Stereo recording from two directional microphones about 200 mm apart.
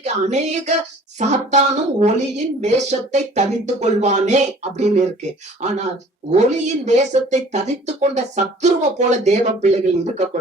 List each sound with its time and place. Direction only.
0.0 s speech: 35° right (ahead or behind)
5.5 s speech: 35° right (ahead or behind)